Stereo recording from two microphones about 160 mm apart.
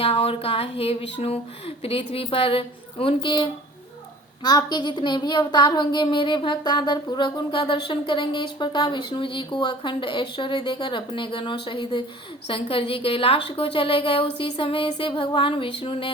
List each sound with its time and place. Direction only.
0.0 s a woman's voice: 35° left (ahead or behind)
4.4 s a woman's voice: 25° left (ahead or behind)